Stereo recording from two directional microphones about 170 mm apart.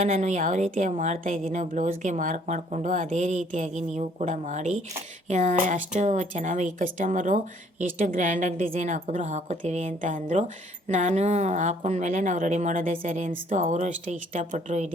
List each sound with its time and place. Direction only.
0.0 s a woman's voice: 45° right (ahead or behind)